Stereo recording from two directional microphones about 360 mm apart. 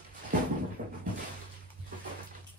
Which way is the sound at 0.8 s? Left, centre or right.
Right.